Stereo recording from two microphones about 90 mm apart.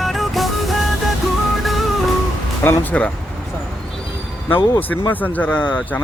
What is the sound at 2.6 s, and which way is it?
Speech, 20° left (ahead or behind).